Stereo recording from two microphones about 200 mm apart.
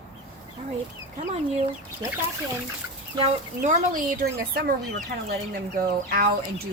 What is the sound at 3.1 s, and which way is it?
Speech, 40° right (ahead or behind).